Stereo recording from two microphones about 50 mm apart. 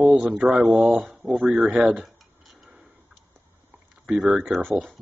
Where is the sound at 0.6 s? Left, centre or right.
Centre.